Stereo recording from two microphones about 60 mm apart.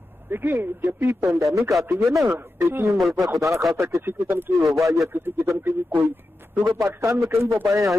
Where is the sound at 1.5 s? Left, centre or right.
Right.